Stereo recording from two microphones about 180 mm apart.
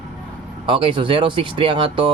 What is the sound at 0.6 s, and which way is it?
Speech, 30° right (ahead or behind).